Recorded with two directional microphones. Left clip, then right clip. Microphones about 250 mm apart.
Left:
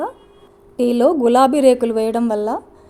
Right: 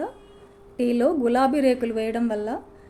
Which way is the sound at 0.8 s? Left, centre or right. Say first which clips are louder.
Left 7 dB; left.